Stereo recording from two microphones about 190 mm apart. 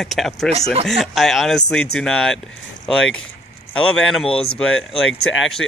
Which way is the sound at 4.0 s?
5° left (ahead or behind).